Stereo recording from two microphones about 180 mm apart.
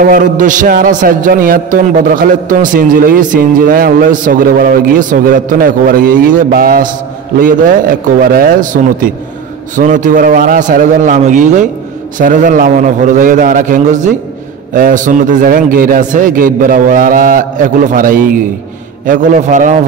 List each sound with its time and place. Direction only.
0.0 s a man's voice: 50° right (ahead or behind)